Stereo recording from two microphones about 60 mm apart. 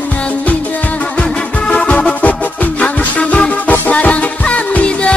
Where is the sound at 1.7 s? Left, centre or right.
Centre.